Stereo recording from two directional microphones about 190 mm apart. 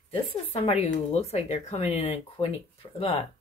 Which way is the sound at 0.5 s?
35° left (ahead or behind).